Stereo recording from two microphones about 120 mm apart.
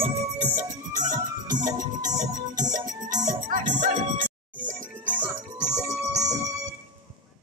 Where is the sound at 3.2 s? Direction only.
90° right.